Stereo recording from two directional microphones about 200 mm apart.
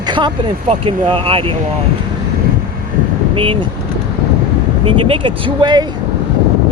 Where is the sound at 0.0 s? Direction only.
20° right (ahead or behind).